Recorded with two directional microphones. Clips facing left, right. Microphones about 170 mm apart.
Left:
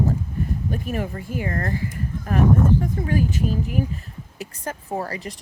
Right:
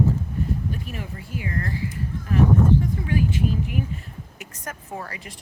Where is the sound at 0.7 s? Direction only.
50° left (ahead or behind).